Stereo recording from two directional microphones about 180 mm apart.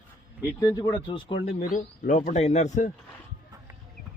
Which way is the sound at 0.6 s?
20° left (ahead or behind).